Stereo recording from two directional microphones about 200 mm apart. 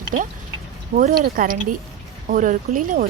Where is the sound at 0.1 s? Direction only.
40° right (ahead or behind).